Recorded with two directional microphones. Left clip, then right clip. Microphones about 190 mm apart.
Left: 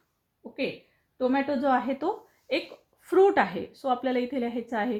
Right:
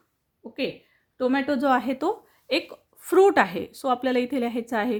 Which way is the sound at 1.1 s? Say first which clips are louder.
Right 2 dB; 50° right (ahead or behind).